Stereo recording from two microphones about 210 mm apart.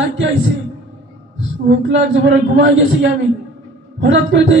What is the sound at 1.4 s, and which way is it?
A man's voice, 65° right (ahead or behind).